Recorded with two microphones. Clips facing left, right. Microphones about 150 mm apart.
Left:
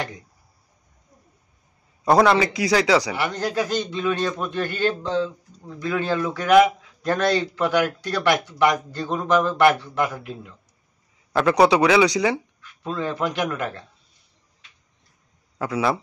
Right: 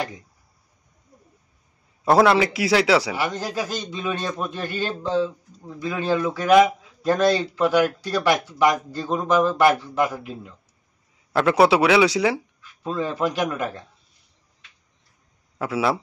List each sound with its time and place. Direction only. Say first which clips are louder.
2.0 s a man's voice: even; centre (ahead or behind)
11.3 s a man's voice: even; centre (ahead or behind)
15.6 s speech: even; 5° right (ahead or behind)